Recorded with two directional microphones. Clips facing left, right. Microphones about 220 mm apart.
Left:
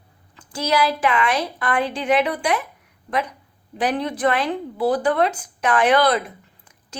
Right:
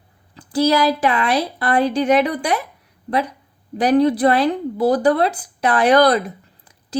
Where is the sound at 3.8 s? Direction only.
40° right (ahead or behind).